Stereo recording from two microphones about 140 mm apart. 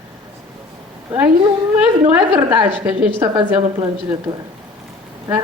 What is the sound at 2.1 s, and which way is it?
A woman's voice, 10° right (ahead or behind).